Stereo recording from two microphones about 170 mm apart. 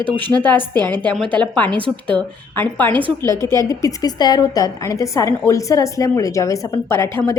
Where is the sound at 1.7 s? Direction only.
30° right (ahead or behind).